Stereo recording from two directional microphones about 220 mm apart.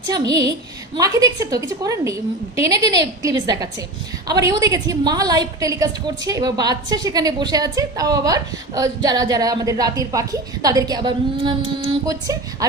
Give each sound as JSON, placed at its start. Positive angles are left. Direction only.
{"t": 0.1, "sound": "a woman's voice", "side_deg": -15}